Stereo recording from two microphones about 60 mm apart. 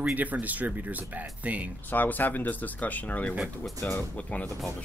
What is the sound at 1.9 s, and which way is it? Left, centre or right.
Speech, left.